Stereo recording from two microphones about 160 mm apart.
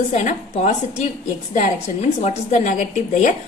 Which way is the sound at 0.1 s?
50° left (ahead or behind).